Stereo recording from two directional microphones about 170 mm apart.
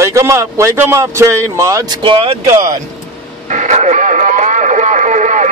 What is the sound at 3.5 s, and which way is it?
Vehicle, 45° right (ahead or behind).